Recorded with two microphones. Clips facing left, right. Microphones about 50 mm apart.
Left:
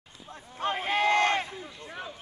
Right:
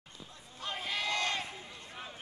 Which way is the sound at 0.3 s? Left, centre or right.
Left.